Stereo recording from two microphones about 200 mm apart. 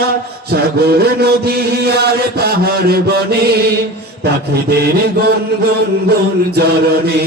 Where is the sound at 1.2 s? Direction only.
50° right (ahead or behind).